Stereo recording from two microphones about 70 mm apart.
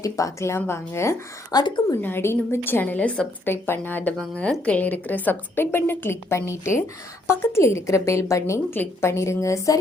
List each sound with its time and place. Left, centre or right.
0.0 s a woman's voice: left
1.5 s a woman's voice: left
2.0 s a woman's voice: left
3.5 s a woman's voice: left
4.2 s a woman's voice: centre; by 8.6 s left
8.7 s a woman's voice: left